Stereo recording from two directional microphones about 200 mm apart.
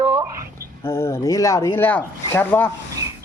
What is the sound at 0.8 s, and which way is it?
Speech, 15° left (ahead or behind).